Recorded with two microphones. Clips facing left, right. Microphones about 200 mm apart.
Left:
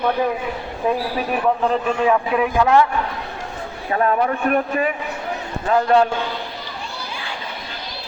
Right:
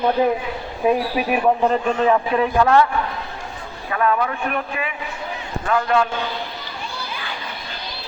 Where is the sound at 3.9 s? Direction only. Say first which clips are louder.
Left 2 dB; 35° left (ahead or behind).